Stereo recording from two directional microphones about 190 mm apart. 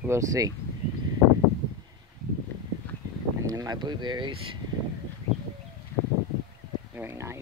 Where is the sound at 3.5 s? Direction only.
20° right (ahead or behind).